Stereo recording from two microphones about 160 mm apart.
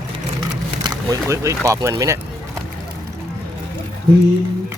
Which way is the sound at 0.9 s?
20° right (ahead or behind).